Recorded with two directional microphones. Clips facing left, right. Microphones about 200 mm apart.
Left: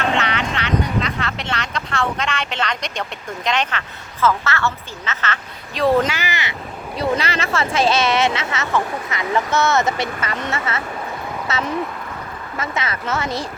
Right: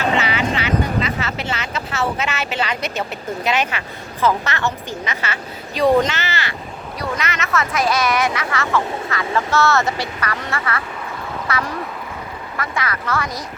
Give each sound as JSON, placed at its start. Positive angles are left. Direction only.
{"t": 0.0, "sound": "speech", "side_deg": -5}
{"t": 5.8, "sound": "speech", "side_deg": 10}
{"t": 7.0, "sound": "speech", "side_deg": 30}